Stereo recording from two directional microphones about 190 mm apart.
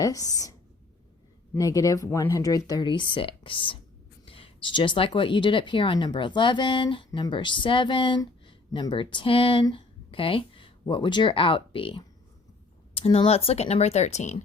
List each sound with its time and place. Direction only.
0.0 s speech: 20° left (ahead or behind)
1.5 s speech: 20° left (ahead or behind); by 14.4 s 35° left (ahead or behind)